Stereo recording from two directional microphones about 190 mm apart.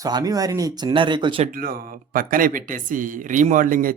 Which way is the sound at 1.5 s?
50° right (ahead or behind).